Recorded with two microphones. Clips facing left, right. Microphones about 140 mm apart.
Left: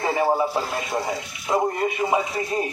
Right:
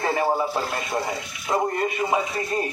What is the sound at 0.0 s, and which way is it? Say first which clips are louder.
A man's voice: left 2 dB; 10° left (ahead or behind).